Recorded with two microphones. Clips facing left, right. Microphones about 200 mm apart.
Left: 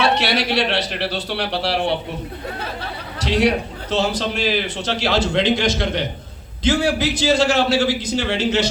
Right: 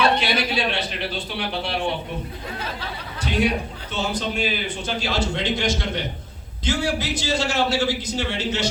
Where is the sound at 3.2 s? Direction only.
80° left.